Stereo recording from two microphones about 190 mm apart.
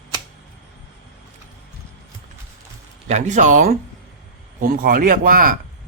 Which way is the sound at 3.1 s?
40° right (ahead or behind).